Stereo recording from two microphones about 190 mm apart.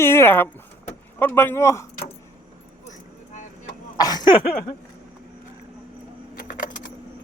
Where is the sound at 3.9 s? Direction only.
20° left (ahead or behind).